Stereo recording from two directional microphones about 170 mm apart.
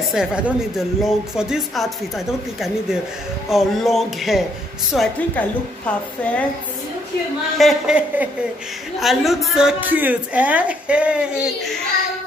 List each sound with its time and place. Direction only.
0.1 s a woman's voice: 5° right (ahead or behind)
7.5 s a woman's voice: centre (ahead or behind)